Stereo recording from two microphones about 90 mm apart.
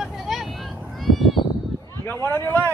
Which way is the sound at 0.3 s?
5° right (ahead or behind).